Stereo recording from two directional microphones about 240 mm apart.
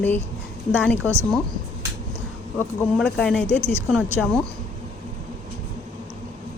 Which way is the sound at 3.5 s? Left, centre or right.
Right.